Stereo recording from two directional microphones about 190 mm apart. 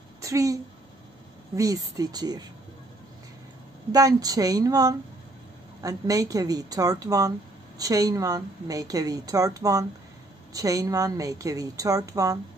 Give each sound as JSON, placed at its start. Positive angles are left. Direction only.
{"t": 0.2, "sound": "a woman's voice", "side_deg": -15}
{"t": 3.9, "sound": "a woman's voice", "side_deg": -20}